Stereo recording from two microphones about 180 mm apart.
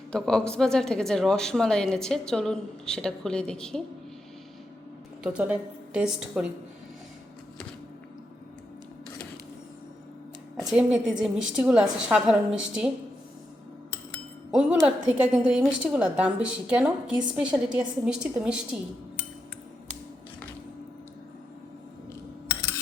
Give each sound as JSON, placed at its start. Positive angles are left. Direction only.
{"t": 0.1, "sound": "a woman's voice", "side_deg": 5}
{"t": 5.2, "sound": "a woman's voice", "side_deg": -5}
{"t": 10.6, "sound": "a woman's voice", "side_deg": -5}
{"t": 14.5, "sound": "a woman's voice", "side_deg": -5}